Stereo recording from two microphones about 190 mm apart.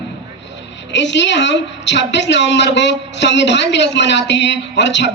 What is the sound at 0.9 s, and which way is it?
A woman's voice, 70° left (ahead or behind).